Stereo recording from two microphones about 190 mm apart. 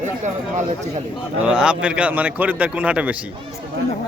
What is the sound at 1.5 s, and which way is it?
A man's voice, 5° right (ahead or behind).